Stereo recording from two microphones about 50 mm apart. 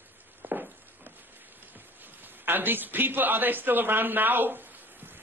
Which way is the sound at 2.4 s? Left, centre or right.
Right.